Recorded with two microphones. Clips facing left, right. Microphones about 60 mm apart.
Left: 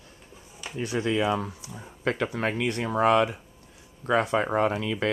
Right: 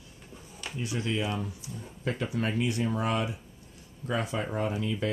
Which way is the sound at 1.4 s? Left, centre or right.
Left.